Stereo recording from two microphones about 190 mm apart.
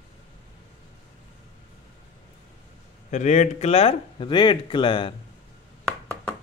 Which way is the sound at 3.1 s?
40° left (ahead or behind).